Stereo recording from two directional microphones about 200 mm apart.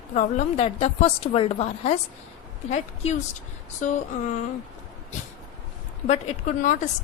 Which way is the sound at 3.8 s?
40° left (ahead or behind).